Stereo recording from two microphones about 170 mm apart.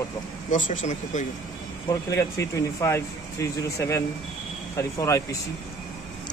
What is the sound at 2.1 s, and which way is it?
Speech, 15° left (ahead or behind).